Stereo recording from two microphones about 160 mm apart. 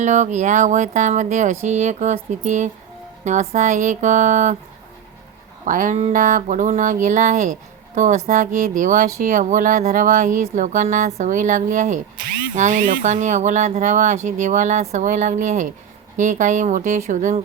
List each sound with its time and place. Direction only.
0.0 s speech: 50° right (ahead or behind)
5.6 s speech: 55° right (ahead or behind)